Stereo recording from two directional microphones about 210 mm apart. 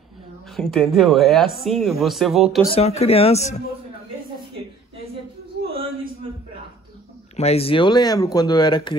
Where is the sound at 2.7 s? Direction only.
30° left (ahead or behind).